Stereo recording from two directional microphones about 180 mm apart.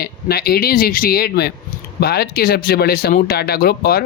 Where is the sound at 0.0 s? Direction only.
60° left (ahead or behind).